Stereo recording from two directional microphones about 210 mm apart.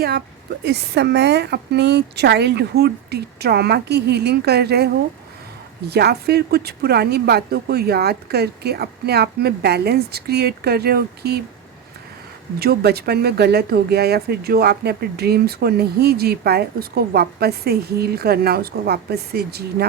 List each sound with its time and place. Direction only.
0.6 s speech: 50° right (ahead or behind)
5.9 s speech: 50° right (ahead or behind)
12.5 s speech: 50° right (ahead or behind)